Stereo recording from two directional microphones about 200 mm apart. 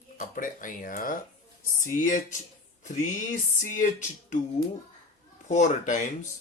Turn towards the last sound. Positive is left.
turn(degrees=40)  # may be behind; listen again after turning